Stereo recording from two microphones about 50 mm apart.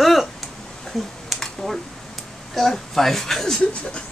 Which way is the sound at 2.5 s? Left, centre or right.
Centre.